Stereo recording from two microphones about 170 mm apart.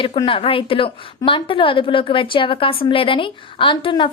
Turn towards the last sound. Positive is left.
turn(degrees=30)  # may be behind; listen again after turning